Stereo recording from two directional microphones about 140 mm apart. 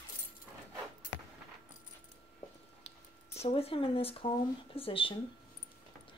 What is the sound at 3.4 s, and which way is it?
Speech, 45° left (ahead or behind).